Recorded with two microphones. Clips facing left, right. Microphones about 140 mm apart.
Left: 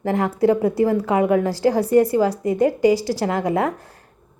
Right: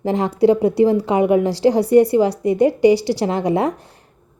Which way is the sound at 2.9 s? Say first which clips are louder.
Right 3 dB; 70° right (ahead or behind).